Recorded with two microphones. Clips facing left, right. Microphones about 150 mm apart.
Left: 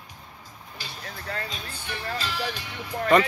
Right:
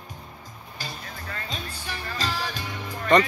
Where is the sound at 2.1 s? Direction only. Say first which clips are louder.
Right 4 dB; 40° right (ahead or behind).